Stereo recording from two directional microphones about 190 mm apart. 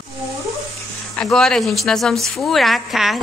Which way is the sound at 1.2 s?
5° left (ahead or behind).